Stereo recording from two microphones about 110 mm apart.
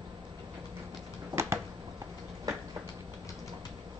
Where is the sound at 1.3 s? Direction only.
25° right (ahead or behind).